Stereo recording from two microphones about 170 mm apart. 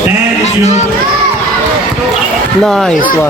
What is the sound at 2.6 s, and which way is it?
Speech, 5° left (ahead or behind).